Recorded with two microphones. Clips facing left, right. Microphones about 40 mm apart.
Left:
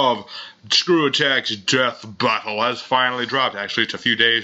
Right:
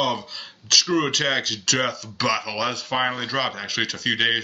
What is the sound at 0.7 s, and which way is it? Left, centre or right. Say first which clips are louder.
Speech: left 4 dB; left.